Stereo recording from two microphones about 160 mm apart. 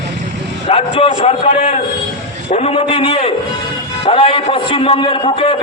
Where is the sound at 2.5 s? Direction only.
40° left (ahead or behind).